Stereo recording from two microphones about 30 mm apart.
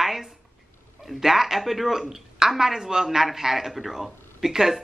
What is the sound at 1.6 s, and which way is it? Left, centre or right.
Speech, centre.